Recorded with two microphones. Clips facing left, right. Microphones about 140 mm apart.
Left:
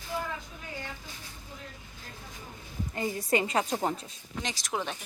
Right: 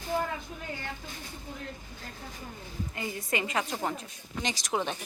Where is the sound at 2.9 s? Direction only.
35° left (ahead or behind).